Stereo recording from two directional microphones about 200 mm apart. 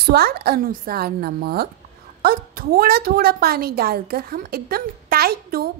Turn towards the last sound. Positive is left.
turn(degrees=-50)  # may be behind; listen again after turning